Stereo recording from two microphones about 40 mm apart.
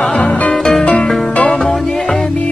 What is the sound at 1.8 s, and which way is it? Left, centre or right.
Music, centre.